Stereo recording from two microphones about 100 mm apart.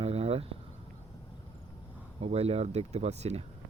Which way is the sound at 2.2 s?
90° right.